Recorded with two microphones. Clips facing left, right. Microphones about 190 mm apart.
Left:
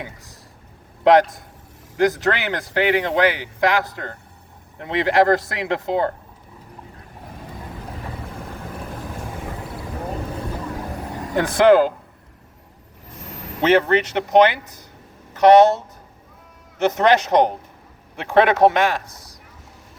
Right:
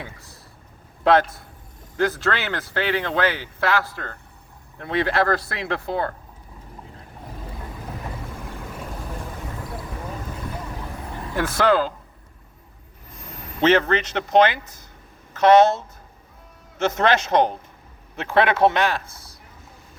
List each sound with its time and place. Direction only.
0.0 s speech: 15° left (ahead or behind)
2.0 s speech: 15° left (ahead or behind)
11.3 s speech: 20° left (ahead or behind)
13.6 s speech: 15° left (ahead or behind)